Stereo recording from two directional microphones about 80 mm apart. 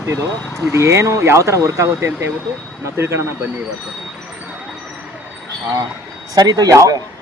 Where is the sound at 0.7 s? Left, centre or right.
Right.